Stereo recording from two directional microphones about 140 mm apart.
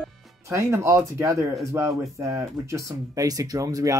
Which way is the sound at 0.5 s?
20° right (ahead or behind).